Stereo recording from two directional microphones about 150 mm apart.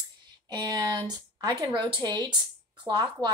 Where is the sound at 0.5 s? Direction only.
30° right (ahead or behind).